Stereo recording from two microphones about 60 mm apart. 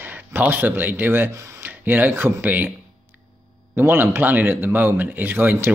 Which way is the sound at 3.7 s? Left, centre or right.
Right.